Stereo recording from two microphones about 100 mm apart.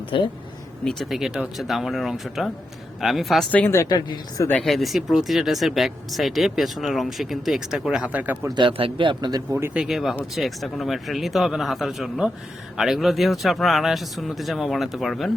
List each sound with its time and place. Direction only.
0.1 s speech: 55° left (ahead or behind)
0.9 s speech: centre (ahead or behind)
3.8 s speech: 40° left (ahead or behind)
4.6 s speech: centre (ahead or behind); by 8.4 s 15° right (ahead or behind)
8.5 s speech: 55° right (ahead or behind)
9.5 s speech: 25° right (ahead or behind)
9.7 s speech: 5° right (ahead or behind)